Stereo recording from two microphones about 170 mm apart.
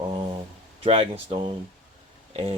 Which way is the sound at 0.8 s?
35° right (ahead or behind).